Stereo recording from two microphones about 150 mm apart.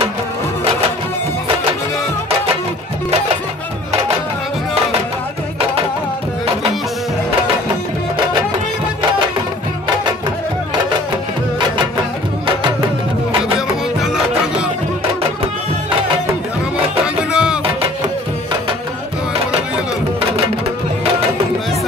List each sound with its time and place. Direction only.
17.0 s music: 5° right (ahead or behind)